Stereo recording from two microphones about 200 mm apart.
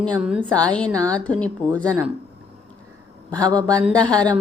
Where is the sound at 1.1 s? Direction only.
5° left (ahead or behind).